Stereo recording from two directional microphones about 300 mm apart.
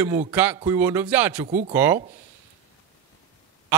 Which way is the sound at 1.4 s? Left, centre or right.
Right.